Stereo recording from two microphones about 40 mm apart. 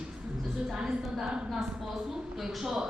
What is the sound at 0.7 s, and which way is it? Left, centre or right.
Speech, centre.